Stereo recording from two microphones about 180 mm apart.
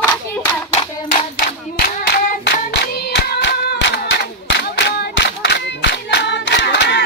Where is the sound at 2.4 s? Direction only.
65° left (ahead or behind).